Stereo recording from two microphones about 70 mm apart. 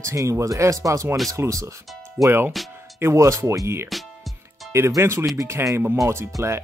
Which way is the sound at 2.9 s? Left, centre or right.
Right.